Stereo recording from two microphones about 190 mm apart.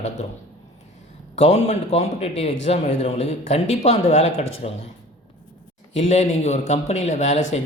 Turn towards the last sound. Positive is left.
turn(degrees=40)  # may be behind; listen again after turning